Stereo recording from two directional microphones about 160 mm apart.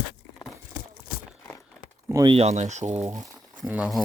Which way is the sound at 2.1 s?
20° right (ahead or behind).